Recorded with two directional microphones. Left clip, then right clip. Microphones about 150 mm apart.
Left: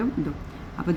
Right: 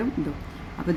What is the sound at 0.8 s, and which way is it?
Speech, 25° left (ahead or behind).